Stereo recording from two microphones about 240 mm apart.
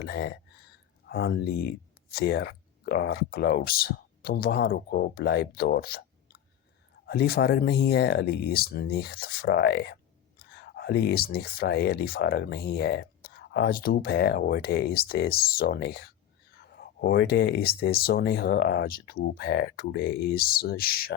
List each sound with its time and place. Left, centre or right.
0.0 s speech: left
7.0 s speech: left